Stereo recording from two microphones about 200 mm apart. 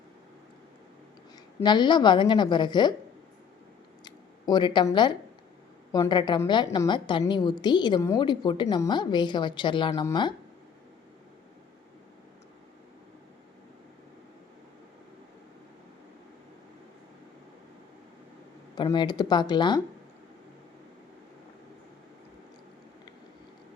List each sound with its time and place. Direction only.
1.6 s a woman's voice: 20° left (ahead or behind)
4.0 s a sound: 20° left (ahead or behind)
5.9 s a woman's voice: 20° left (ahead or behind)
18.7 s a woman's voice: 20° left (ahead or behind)